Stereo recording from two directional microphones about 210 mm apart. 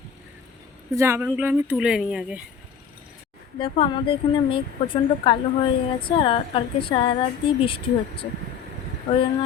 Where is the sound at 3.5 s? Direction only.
25° left (ahead or behind).